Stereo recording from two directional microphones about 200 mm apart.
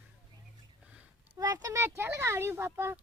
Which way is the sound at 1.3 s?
15° right (ahead or behind).